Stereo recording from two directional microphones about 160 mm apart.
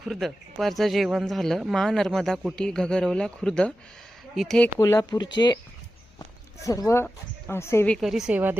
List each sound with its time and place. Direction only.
0.0 s speech: centre (ahead or behind)
4.8 s speech: 20° left (ahead or behind)
6.6 s speech: 20° left (ahead or behind)
7.9 s speech: centre (ahead or behind)